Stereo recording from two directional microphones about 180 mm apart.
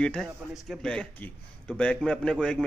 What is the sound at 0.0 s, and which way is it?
A man's voice, 5° left (ahead or behind).